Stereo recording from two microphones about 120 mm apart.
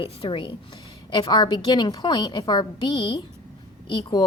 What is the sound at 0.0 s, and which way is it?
A woman's voice, 45° left (ahead or behind).